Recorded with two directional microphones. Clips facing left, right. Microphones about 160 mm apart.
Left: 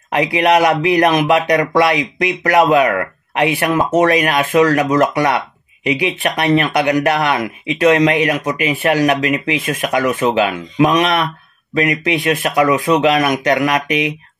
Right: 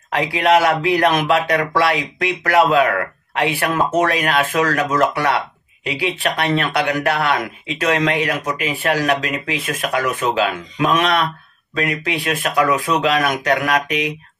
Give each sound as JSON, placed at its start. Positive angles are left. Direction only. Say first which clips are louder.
{"t": 0.1, "sound": "speech", "louder": "left 2 dB", "side_deg": 20}